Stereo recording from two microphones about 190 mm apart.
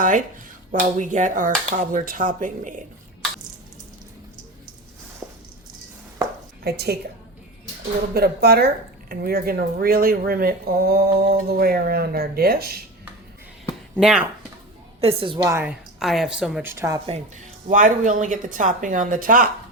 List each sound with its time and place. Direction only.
0.0 s speech: 40° right (ahead or behind)
5.2 s a sound: 5° right (ahead or behind)
6.7 s a woman's voice: 55° right (ahead or behind)
8.1 s speech: 55° right (ahead or behind)
13.9 s speech: 5° right (ahead or behind)
15.0 s a woman's voice: 25° right (ahead or behind)
16.0 s speech: centre (ahead or behind)
16.7 s speech: 15° right (ahead or behind)
17.7 s speech: 45° right (ahead or behind)